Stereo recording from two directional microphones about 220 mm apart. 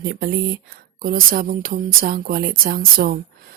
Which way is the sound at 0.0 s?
45° right (ahead or behind).